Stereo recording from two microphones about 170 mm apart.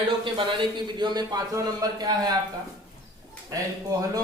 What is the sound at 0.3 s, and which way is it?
Speech, 25° right (ahead or behind).